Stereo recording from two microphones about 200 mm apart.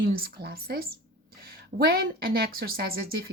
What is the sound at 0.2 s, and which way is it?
A woman's voice, 50° right (ahead or behind).